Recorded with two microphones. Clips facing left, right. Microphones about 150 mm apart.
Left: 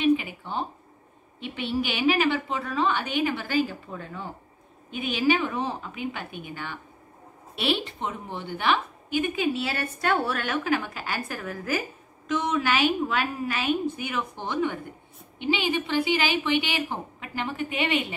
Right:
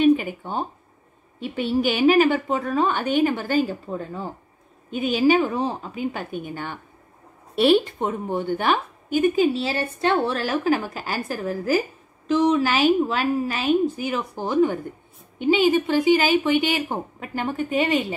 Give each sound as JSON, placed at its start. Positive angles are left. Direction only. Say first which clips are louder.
{"t": 0.0, "sound": "a woman's voice", "louder": "right 5 dB", "side_deg": -45}